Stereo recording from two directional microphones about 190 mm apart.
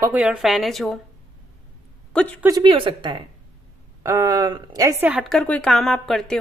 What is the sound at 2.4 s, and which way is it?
A woman's voice, 25° right (ahead or behind).